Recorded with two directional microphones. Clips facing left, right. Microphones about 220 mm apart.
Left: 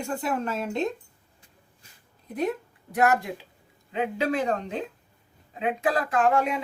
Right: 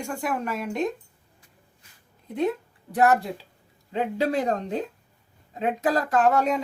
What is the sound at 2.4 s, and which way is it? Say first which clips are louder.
Speech: right 2 dB; 30° right (ahead or behind).